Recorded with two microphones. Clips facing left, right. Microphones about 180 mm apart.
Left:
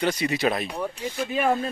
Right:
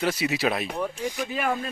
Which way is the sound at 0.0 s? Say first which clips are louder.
Left 1 dB; 5° right (ahead or behind).